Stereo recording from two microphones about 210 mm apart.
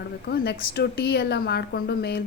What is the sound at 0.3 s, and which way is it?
A woman's voice, 50° left (ahead or behind).